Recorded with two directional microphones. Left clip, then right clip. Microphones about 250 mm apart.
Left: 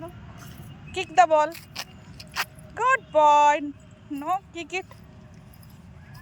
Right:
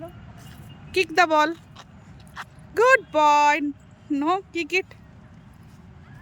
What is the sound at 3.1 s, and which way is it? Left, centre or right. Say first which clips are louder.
Speech: even; centre.